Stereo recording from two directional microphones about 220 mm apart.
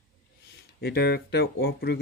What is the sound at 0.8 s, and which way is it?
Speech, 45° left (ahead or behind).